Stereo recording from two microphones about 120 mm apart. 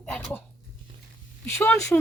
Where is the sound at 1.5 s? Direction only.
20° left (ahead or behind).